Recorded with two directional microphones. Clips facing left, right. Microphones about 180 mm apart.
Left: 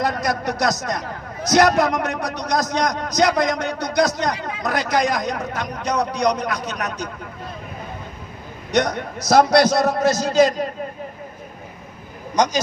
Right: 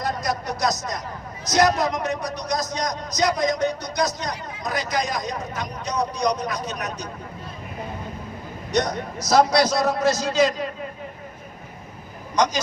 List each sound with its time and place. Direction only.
0.0 s a man's voice: 65° left (ahead or behind)
8.7 s a man's voice: 60° left (ahead or behind); by 10.7 s 45° left (ahead or behind)